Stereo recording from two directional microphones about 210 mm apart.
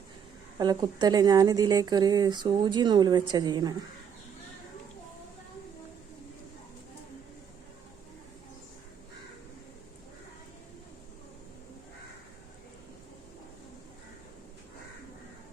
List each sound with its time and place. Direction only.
0.6 s speech: 20° right (ahead or behind)